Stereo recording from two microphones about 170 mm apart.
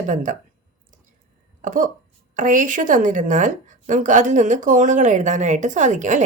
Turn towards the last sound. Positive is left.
turn(degrees=-45)  # may be behind; listen again after turning